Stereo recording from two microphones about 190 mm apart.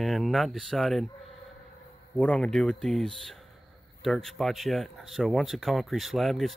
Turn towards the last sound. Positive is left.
turn(degrees=0)  # may be behind; listen again after turning